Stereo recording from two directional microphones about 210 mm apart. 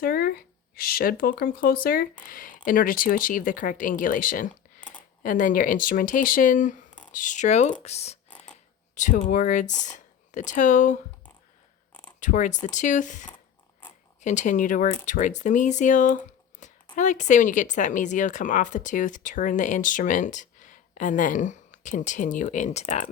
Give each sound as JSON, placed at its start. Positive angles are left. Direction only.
{"t": 0.0, "sound": "speech", "side_deg": 45}
{"t": 4.8, "sound": "a sound", "side_deg": 5}
{"t": 5.2, "sound": "speech", "side_deg": 40}
{"t": 12.2, "sound": "speech", "side_deg": 35}